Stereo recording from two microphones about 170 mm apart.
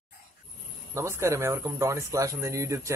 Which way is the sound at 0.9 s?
15° right (ahead or behind).